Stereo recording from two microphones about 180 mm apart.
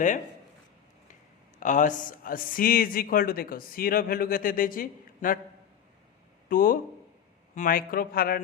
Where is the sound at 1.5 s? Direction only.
45° left (ahead or behind).